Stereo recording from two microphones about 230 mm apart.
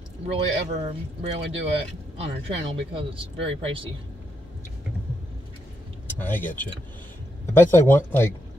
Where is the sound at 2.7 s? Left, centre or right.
Right.